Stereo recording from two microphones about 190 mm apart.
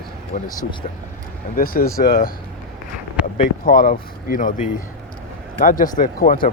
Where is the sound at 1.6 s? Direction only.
50° left (ahead or behind).